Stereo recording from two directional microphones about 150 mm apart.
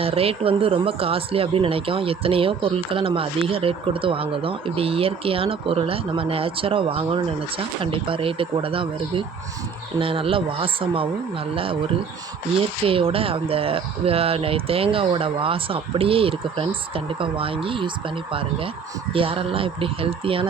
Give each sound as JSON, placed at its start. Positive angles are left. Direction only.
{"t": 0.0, "sound": "speech", "side_deg": -40}
{"t": 12.8, "sound": "speech", "side_deg": -40}